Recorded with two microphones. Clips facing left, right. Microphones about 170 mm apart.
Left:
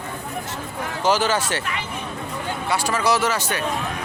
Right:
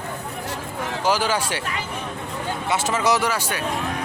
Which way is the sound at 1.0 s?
10° right (ahead or behind).